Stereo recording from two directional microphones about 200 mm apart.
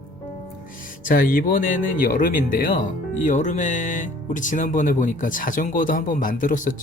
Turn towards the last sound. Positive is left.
turn(degrees=40)  # may be behind; listen again after turning